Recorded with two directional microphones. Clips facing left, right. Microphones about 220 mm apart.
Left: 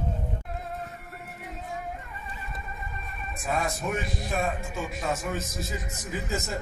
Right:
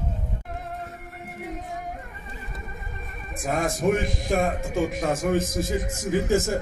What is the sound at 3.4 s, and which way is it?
Speech, 50° right (ahead or behind).